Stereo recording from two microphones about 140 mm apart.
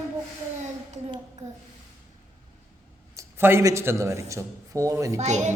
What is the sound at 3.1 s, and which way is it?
A man's voice, 20° right (ahead or behind).